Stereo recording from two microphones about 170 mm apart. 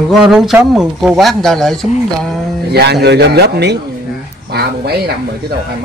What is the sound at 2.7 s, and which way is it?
A man's voice, 75° right (ahead or behind).